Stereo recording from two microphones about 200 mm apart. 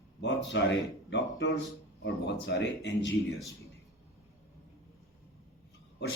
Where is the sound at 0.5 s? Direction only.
60° left (ahead or behind).